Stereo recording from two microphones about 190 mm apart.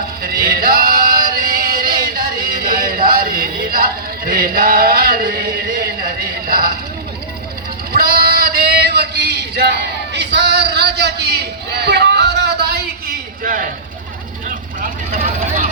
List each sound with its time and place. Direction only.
0.2 s male singing: 50° right (ahead or behind)
7.9 s a sound: 50° right (ahead or behind)
14.8 s vehicle: 45° right (ahead or behind)